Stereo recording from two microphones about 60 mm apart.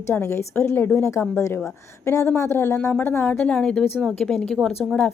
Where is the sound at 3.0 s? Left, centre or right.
Left.